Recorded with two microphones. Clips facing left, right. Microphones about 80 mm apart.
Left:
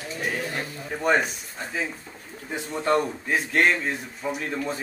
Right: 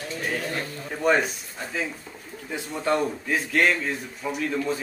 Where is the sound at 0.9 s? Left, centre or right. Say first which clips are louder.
Right 1 dB; centre.